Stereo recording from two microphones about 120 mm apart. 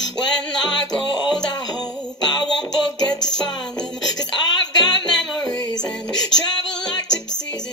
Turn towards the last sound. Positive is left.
turn(degrees=35)  # may be behind; listen again after turning